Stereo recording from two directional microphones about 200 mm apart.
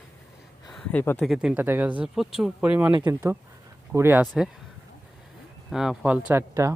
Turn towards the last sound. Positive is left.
turn(degrees=-15)  # may be behind; listen again after turning